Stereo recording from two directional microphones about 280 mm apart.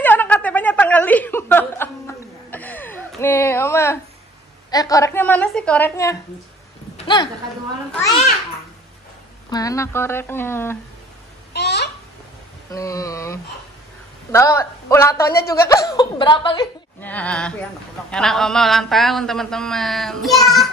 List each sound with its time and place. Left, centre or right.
0.0 s chuckle: centre
4.6 s a woman's voice: centre
7.0 s a sound: centre
7.9 s a woman's voice: centre
9.5 s a woman's voice: centre
11.5 s a sound: left
12.7 s a sound: centre
14.3 s a woman's voice: centre
17.0 s speech: centre